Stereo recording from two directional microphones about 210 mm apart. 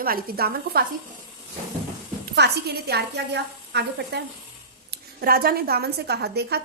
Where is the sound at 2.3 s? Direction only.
50° right (ahead or behind).